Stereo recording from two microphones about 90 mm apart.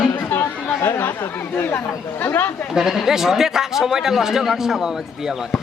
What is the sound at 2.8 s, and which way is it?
A man's voice, 5° right (ahead or behind).